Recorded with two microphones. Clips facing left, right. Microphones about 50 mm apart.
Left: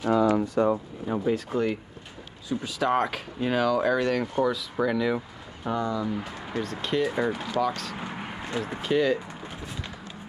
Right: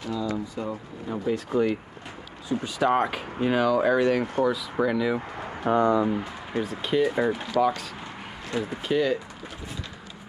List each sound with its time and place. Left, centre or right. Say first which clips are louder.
0.0 s a sound: left 7 dB; left
1.0 s speech: left 2 dB; centre
1.3 s speech: right 6 dB; centre
5.7 s speech: right 7 dB; right
6.1 s speech: right 2 dB; centre
8.5 s speech: right 1 dB; centre